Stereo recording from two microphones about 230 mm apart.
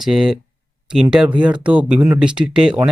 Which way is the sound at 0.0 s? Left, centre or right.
Centre.